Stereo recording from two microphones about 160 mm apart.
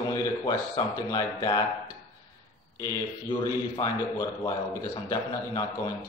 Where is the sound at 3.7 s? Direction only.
20° left (ahead or behind).